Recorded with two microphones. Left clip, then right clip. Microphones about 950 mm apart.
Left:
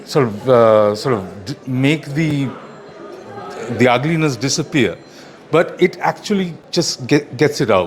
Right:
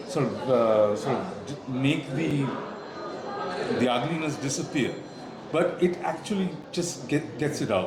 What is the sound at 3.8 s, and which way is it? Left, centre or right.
A man's voice, left.